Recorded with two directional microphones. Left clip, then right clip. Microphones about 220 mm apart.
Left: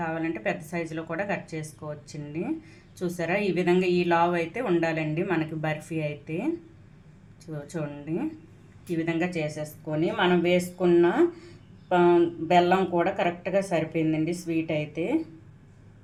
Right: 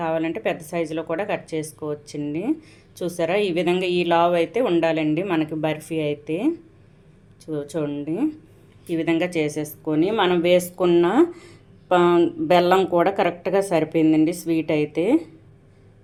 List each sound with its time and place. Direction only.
0.0 s a woman's voice: 40° right (ahead or behind)
7.5 s a woman's voice: 35° right (ahead or behind)